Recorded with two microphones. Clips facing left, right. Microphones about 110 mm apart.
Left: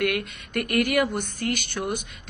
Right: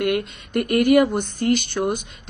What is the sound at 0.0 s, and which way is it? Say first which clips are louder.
Speech: right 4 dB; 25° right (ahead or behind).